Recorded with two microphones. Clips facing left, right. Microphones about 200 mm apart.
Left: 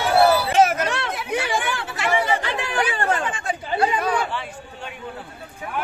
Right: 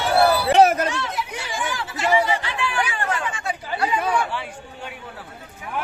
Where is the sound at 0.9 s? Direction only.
60° left (ahead or behind).